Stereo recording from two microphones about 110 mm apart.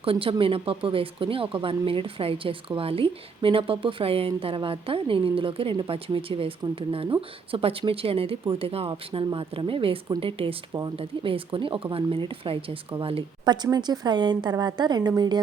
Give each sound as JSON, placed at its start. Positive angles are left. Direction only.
{"t": 0.0, "sound": "speech", "side_deg": -55}
{"t": 13.4, "sound": "speech", "side_deg": -40}